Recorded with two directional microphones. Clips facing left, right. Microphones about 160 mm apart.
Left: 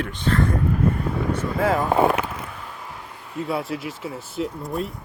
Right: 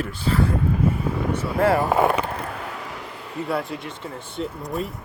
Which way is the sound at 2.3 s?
65° right (ahead or behind).